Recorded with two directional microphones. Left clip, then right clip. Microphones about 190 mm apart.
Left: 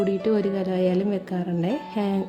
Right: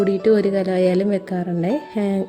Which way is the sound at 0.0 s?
20° right (ahead or behind).